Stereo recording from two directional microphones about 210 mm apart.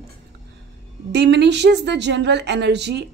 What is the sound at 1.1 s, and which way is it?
A woman's voice, 55° right (ahead or behind).